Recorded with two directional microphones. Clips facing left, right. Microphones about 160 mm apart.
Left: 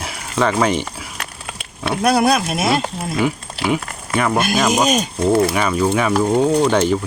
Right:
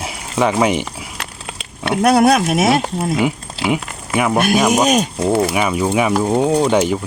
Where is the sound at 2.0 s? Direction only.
65° right (ahead or behind).